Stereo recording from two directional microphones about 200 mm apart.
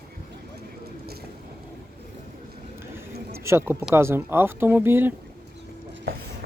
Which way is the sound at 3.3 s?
15° right (ahead or behind).